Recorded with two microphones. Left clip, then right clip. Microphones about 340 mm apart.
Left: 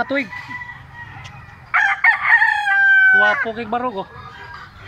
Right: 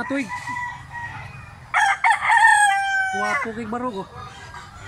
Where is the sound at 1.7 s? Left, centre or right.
Centre.